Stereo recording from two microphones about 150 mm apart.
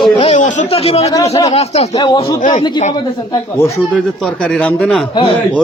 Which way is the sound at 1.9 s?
30° left (ahead or behind).